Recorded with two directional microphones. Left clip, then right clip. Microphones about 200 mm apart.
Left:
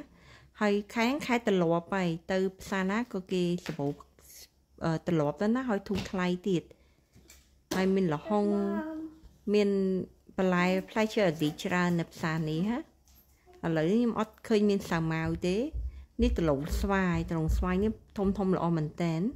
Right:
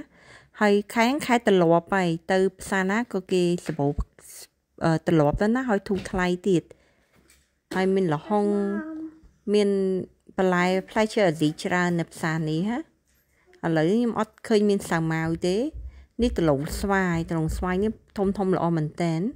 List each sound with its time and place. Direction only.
0.0 s a woman's voice: 30° right (ahead or behind)